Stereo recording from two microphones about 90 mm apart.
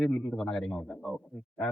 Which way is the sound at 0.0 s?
5° left (ahead or behind).